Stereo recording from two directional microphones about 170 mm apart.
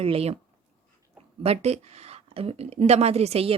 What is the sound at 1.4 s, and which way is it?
Speech, 35° right (ahead or behind).